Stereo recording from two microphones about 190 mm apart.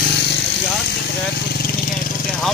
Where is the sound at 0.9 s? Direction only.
60° left (ahead or behind).